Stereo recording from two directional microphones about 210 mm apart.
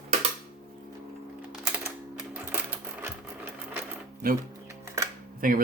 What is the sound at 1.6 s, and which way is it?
Sewing machine, 10° right (ahead or behind).